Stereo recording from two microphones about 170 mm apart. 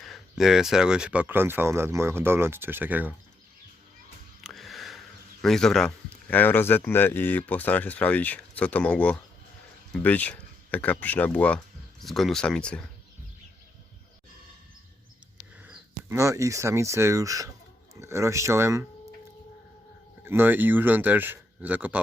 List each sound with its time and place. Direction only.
0.0 s speech: centre (ahead or behind)
4.4 s a sound: centre (ahead or behind)
5.4 s speech: 5° left (ahead or behind)
15.6 s speech: 10° right (ahead or behind)
20.2 s speech: 10° right (ahead or behind)